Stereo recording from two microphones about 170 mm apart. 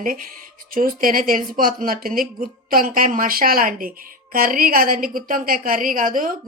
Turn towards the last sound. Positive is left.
turn(degrees=-50)  # may be behind; listen again after turning